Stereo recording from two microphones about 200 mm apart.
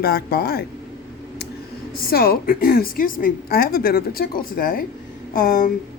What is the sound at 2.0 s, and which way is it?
A woman's voice, 50° left (ahead or behind).